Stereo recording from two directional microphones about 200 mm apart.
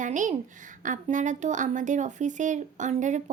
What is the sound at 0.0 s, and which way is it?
A woman's voice, 40° right (ahead or behind).